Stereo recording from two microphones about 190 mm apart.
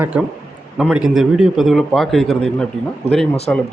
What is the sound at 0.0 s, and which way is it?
A man's voice, 10° right (ahead or behind).